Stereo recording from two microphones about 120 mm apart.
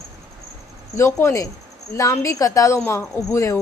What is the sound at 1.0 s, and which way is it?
Speech, 20° left (ahead or behind).